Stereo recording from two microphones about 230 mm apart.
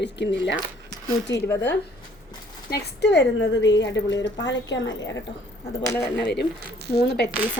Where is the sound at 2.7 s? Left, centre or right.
Left.